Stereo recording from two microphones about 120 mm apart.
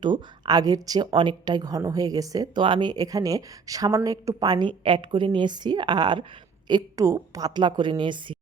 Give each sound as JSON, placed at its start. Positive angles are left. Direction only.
{"t": 0.0, "sound": "a woman's voice", "side_deg": -35}
{"t": 2.6, "sound": "a woman's voice", "side_deg": -45}